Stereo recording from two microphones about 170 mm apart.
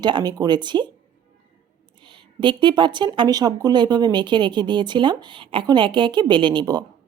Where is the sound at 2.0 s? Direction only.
30° right (ahead or behind).